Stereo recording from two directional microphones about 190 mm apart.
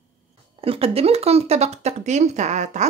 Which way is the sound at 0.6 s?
30° right (ahead or behind).